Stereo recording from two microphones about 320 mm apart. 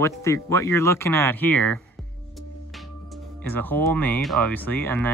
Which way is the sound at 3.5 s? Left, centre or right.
Centre.